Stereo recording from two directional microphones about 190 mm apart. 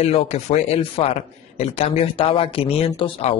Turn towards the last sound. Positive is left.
turn(degrees=35)  # may be behind; listen again after turning